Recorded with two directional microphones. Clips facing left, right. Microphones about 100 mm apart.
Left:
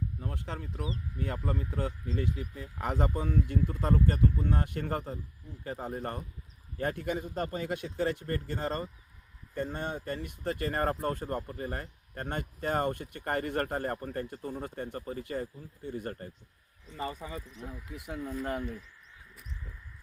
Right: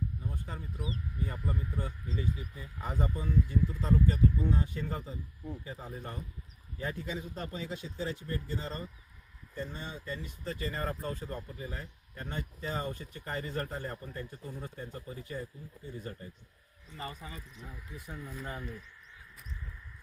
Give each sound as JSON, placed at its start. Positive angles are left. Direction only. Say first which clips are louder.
{"t": 0.2, "sound": "speech", "louder": "left 3 dB", "side_deg": 80}
{"t": 17.9, "sound": "speech", "louder": "left 4 dB", "side_deg": 80}